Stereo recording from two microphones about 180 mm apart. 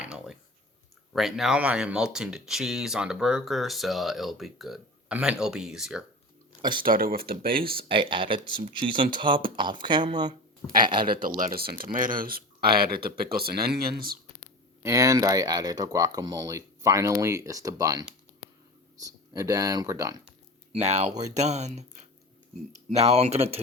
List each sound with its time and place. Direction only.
0.0 s a sound: 5° right (ahead or behind)
1.1 s speech: centre (ahead or behind)
6.6 s speech: 25° right (ahead or behind)
6.8 s speech: 55° right (ahead or behind)
7.9 s speech: 30° right (ahead or behind)
11.2 s speech: 50° right (ahead or behind)
14.8 s speech: 15° right (ahead or behind)
20.7 s speech: 40° right (ahead or behind)
22.9 s speech: 35° right (ahead or behind)